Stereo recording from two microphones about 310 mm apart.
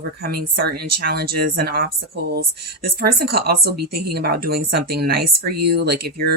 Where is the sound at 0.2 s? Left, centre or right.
Right.